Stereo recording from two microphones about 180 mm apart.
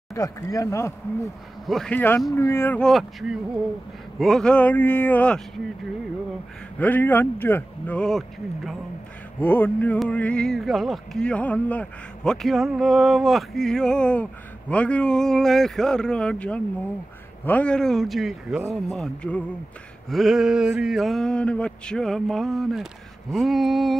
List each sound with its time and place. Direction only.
0.1 s speech: 20° left (ahead or behind)
1.7 s speech: 5° left (ahead or behind)
6.8 s speech: 10° left (ahead or behind)